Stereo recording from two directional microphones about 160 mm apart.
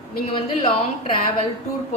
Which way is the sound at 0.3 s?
35° left (ahead or behind).